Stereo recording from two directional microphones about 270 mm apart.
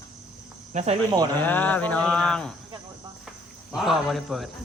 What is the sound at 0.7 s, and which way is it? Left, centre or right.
Speech, right.